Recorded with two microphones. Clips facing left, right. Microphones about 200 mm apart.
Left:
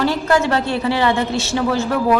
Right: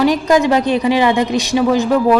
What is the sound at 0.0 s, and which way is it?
A woman's voice, 15° right (ahead or behind).